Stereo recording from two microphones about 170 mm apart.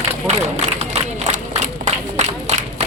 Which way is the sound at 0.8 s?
40° right (ahead or behind).